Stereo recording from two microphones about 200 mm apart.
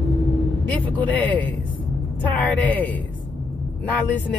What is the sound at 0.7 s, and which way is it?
Speech, 10° left (ahead or behind).